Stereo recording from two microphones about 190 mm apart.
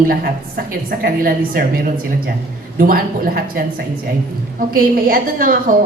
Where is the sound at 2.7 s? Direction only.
50° right (ahead or behind).